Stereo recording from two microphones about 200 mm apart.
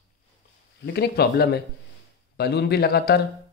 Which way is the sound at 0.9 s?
55° left (ahead or behind).